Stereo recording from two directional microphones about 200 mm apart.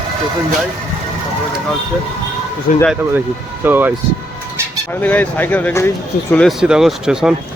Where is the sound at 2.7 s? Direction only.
40° left (ahead or behind).